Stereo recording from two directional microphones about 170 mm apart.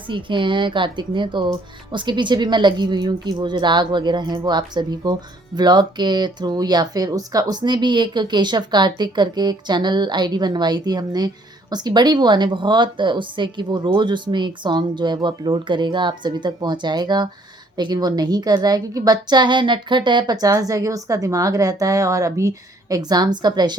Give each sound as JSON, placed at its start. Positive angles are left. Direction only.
{"t": 0.1, "sound": "a woman's voice", "side_deg": -30}